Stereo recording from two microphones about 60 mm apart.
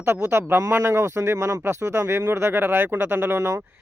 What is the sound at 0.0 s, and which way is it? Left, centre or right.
Speech, right.